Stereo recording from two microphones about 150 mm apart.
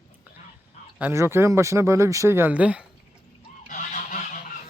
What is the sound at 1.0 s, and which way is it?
Speech, 15° right (ahead or behind).